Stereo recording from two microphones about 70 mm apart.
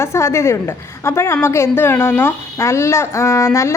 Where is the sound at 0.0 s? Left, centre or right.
Left.